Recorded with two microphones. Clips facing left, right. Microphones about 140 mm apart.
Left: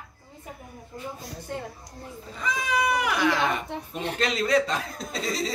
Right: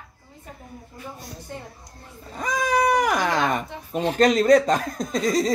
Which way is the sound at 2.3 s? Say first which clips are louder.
Right 5 dB; 45° right (ahead or behind).